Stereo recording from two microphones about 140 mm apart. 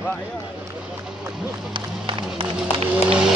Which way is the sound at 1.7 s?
35° right (ahead or behind).